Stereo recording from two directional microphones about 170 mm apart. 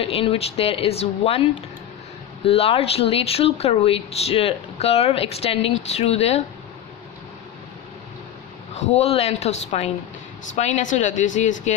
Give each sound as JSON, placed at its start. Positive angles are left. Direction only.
{"t": 0.0, "sound": "speech", "side_deg": 35}
{"t": 2.4, "sound": "speech", "side_deg": 35}
{"t": 8.7, "sound": "speech", "side_deg": 40}